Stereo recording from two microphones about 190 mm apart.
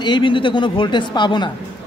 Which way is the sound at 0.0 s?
25° left (ahead or behind).